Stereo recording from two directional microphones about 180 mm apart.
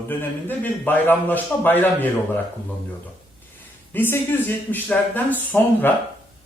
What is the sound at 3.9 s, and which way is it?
Speech, 10° left (ahead or behind).